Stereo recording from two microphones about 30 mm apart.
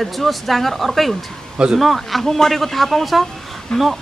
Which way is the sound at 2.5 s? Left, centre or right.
Centre.